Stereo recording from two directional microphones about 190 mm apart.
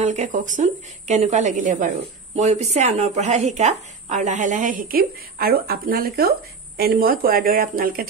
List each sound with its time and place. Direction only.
0.0 s speech: 40° right (ahead or behind)